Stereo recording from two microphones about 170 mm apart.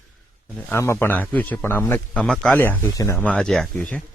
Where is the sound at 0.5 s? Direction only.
15° left (ahead or behind).